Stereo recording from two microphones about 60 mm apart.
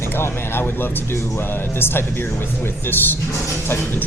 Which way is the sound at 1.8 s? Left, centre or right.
Left.